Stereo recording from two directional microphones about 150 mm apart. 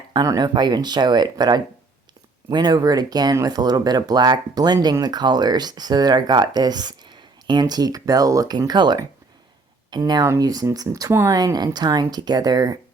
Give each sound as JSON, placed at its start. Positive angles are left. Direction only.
{"t": 0.1, "sound": "speech", "side_deg": -25}